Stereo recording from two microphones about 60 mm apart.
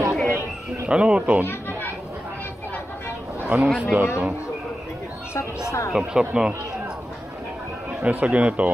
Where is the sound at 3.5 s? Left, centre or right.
Right.